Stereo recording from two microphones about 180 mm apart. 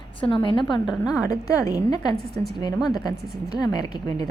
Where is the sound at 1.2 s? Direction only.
20° left (ahead or behind).